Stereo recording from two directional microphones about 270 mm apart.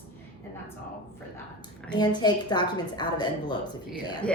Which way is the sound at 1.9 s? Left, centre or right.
Centre.